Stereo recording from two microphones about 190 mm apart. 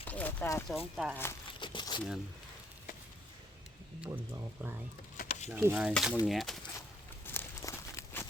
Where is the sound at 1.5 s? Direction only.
25° left (ahead or behind).